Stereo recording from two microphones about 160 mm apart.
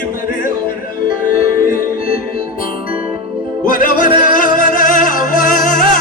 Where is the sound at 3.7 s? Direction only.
55° left (ahead or behind).